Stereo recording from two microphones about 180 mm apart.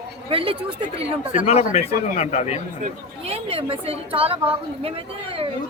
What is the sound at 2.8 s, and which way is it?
Speech, 35° right (ahead or behind).